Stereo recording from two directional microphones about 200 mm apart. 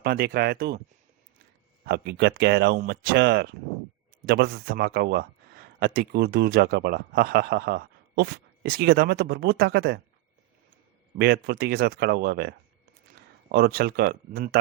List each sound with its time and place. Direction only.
0.0 s speech: 50° right (ahead or behind)
1.8 s speech: 50° right (ahead or behind)
11.2 s speech: 55° right (ahead or behind)